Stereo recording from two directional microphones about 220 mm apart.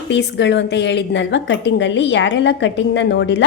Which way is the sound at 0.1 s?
50° left (ahead or behind).